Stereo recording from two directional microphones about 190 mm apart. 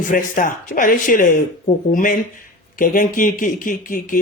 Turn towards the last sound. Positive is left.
turn(degrees=45)  # may be behind; listen again after turning